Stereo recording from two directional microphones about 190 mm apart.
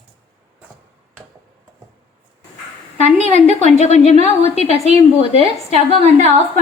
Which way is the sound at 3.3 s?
35° left (ahead or behind).